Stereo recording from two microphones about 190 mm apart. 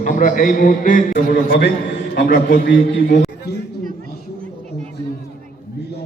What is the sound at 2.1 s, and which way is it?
A man's voice, 50° left (ahead or behind).